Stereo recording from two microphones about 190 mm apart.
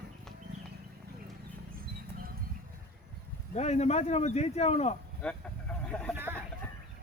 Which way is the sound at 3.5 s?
35° left (ahead or behind).